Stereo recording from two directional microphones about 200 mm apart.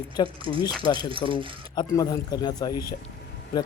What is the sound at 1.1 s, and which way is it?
Speech, 25° right (ahead or behind).